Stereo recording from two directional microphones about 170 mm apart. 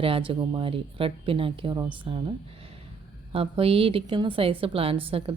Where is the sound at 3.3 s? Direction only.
35° right (ahead or behind).